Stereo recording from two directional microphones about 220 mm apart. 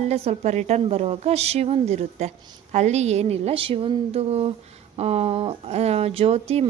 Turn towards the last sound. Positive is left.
turn(degrees=-30)  # may be behind; listen again after turning